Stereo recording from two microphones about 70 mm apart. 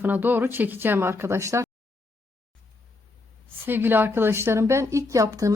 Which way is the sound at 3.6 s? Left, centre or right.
Right.